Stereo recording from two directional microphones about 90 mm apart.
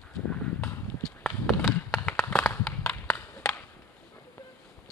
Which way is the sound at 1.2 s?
5° right (ahead or behind).